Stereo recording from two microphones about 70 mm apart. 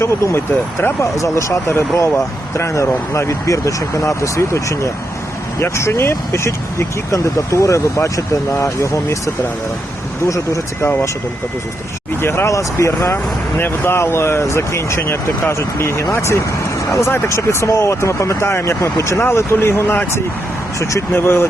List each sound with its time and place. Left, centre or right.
0.0 s speech: left
12.2 s speech: left
12.5 s speech: left